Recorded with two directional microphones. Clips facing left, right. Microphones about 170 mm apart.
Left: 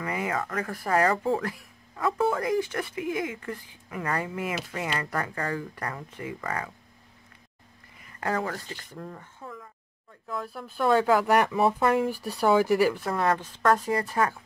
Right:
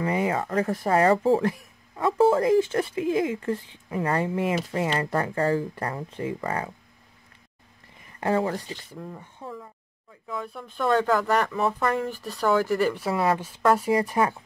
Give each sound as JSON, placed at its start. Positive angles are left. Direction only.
{"t": 0.0, "sound": "speech", "side_deg": -30}
{"t": 8.2, "sound": "speech", "side_deg": -25}